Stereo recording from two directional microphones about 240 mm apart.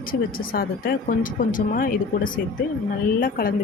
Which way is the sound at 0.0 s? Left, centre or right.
Left.